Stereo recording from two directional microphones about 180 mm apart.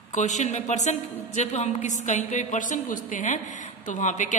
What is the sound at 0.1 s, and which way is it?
A woman's voice, 40° left (ahead or behind).